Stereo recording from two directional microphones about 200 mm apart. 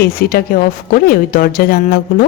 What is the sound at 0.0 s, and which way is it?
Speech, 50° left (ahead or behind).